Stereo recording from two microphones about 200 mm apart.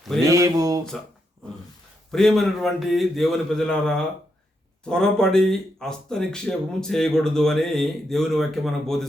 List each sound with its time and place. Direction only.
0.3 s speech: 15° right (ahead or behind)
2.1 s speech: centre (ahead or behind)